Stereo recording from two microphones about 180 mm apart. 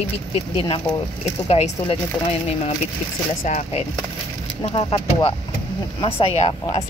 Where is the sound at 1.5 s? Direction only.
35° left (ahead or behind).